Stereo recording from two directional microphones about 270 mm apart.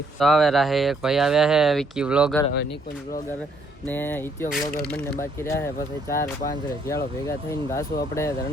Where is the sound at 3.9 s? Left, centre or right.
Centre.